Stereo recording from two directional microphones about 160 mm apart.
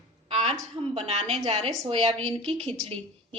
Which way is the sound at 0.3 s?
40° right (ahead or behind).